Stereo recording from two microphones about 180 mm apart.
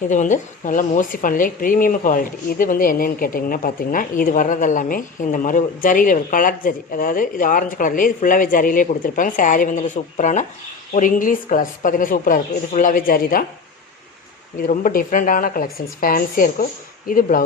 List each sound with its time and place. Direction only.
0.1 s speech: 45° left (ahead or behind)
14.7 s speech: 45° left (ahead or behind)